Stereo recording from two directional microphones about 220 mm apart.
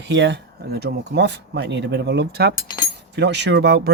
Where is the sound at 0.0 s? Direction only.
55° right (ahead or behind).